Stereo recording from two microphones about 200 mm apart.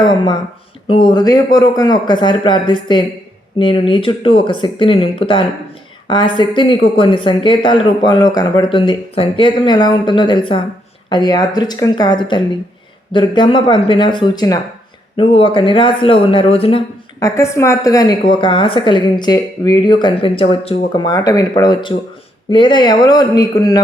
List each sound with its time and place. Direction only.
0.0 s a woman's voice: 20° left (ahead or behind)
17.2 s a woman's voice: 15° left (ahead or behind)